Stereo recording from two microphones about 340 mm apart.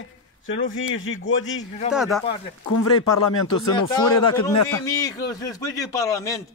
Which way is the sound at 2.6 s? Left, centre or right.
Left.